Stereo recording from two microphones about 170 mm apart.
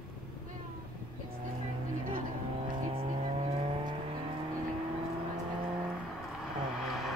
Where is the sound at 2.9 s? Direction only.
35° right (ahead or behind).